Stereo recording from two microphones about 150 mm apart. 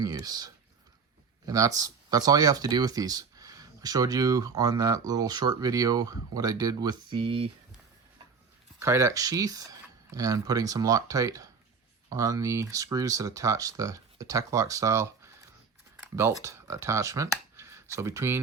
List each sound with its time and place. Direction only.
0.0 s speech: 25° right (ahead or behind)
8.8 s speech: 20° right (ahead or behind)